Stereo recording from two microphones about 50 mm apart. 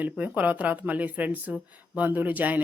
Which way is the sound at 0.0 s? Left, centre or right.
Right.